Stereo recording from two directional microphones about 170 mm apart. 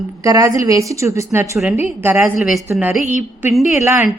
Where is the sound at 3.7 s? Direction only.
15° right (ahead or behind).